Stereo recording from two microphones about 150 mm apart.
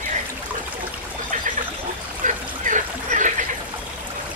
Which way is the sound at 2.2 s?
55° right (ahead or behind).